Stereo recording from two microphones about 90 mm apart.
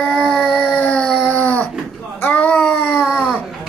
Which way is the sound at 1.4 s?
15° left (ahead or behind).